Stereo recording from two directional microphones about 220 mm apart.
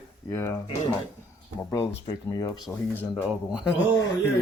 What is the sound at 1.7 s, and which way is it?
Speech, 15° left (ahead or behind).